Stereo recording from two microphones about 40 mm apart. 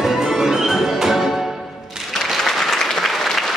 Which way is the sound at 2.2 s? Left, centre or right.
Centre.